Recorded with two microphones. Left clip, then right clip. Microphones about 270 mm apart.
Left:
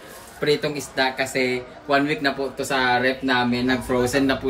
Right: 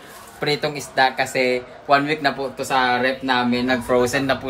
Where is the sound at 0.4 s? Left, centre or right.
Right.